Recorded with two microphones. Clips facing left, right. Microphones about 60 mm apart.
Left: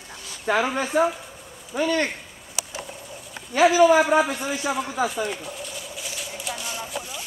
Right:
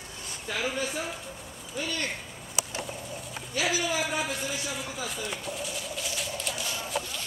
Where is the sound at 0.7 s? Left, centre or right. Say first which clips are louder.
Left 10 dB; left.